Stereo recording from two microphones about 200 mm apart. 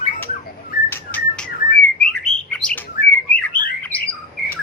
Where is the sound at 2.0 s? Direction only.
5° left (ahead or behind).